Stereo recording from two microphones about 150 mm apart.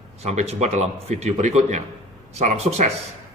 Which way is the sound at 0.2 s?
45° right (ahead or behind).